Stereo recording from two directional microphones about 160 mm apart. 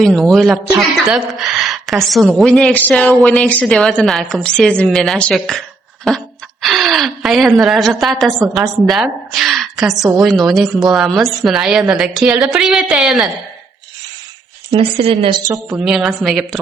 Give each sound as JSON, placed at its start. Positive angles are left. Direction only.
{"t": 0.0, "sound": "a woman's voice", "side_deg": 5}
{"t": 14.7, "sound": "speech", "side_deg": -35}
{"t": 15.8, "sound": "a woman's voice", "side_deg": -5}